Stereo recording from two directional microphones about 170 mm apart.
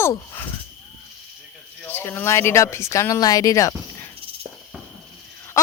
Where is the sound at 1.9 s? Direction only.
10° left (ahead or behind).